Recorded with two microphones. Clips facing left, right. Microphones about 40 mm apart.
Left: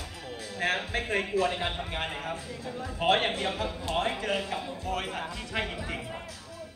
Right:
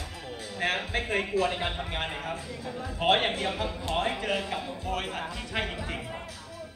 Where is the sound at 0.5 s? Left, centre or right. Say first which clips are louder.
Even; centre.